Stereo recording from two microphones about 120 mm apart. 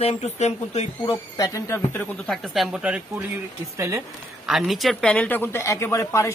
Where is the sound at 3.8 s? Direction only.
25° right (ahead or behind).